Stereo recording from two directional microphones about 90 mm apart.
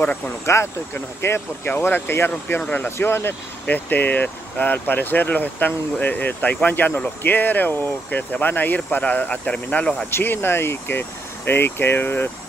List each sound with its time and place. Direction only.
0.5 s speech: 30° left (ahead or behind)